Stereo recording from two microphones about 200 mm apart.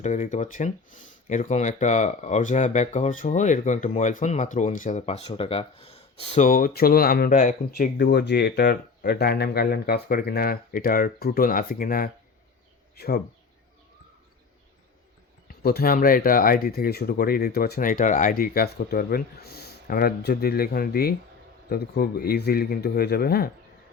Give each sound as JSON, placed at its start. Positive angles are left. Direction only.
{"t": 0.0, "sound": "speech", "side_deg": 35}
{"t": 7.9, "sound": "speech", "side_deg": 60}
{"t": 15.4, "sound": "speech", "side_deg": 50}